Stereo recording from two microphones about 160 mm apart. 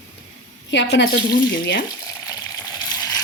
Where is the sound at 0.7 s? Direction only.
90° left.